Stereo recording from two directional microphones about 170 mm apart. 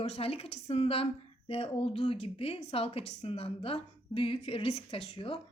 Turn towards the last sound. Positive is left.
turn(degrees=30)  # may be behind; listen again after turning